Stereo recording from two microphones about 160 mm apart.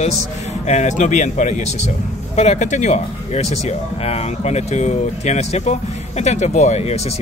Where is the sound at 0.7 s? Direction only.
45° left (ahead or behind).